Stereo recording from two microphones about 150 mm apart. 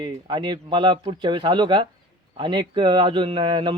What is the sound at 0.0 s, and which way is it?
A man's voice, 30° right (ahead or behind).